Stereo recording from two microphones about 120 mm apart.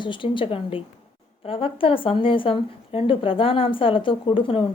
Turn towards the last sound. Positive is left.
turn(degrees=45)  # may be behind; listen again after turning